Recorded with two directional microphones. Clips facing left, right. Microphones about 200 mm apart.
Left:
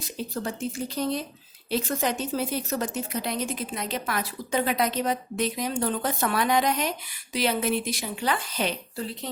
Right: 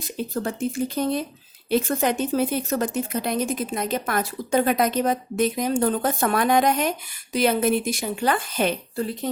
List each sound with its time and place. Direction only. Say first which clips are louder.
0.4 s speech: right 5 dB; 55° right (ahead or behind)